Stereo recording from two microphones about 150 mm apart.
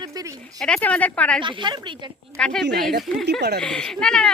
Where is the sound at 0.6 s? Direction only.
5° left (ahead or behind).